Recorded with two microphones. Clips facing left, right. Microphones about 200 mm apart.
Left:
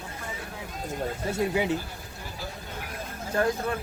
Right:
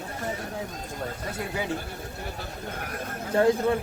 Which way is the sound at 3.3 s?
25° right (ahead or behind).